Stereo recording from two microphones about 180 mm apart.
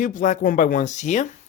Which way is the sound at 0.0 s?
45° left (ahead or behind).